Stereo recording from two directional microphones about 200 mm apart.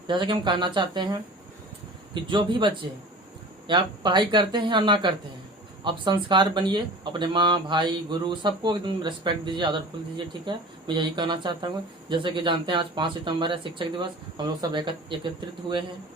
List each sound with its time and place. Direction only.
0.1 s speech: 25° right (ahead or behind)
2.2 s speech: 25° right (ahead or behind)